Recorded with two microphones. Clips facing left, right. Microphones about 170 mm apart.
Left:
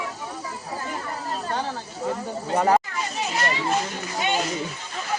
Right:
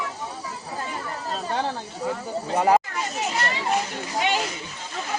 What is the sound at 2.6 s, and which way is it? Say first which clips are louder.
Speech: right 1 dB; 10° right (ahead or behind).